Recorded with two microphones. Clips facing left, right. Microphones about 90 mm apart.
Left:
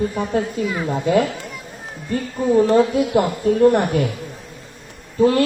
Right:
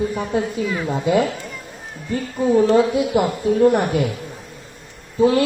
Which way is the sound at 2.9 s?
15° right (ahead or behind).